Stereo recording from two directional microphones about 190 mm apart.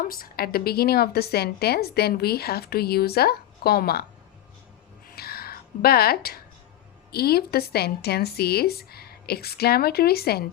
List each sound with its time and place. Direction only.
0.0 s a woman's voice: 50° left (ahead or behind)
5.0 s a sound: 55° left (ahead or behind)
7.1 s a woman's voice: 55° left (ahead or behind)